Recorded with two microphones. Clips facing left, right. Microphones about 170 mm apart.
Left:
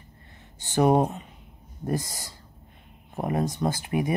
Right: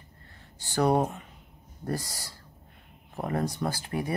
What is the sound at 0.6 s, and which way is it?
Speech, 20° left (ahead or behind).